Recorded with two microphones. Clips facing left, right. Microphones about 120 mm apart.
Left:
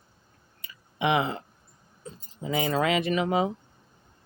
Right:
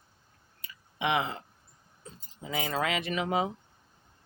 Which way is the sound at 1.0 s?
10° left (ahead or behind).